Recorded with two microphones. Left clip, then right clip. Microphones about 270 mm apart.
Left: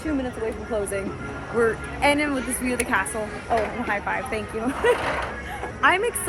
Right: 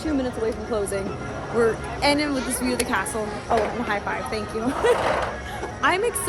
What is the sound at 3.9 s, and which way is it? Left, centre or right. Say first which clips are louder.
Speech: even; centre.